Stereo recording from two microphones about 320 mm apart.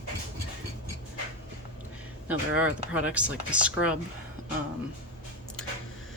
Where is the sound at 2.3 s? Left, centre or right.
Centre.